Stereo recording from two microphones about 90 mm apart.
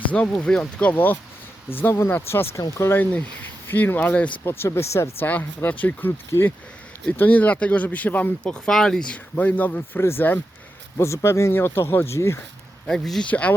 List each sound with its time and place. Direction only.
0.1 s speech: 15° left (ahead or behind)
4.4 s speech: 25° left (ahead or behind)
12.9 s speech: 5° left (ahead or behind)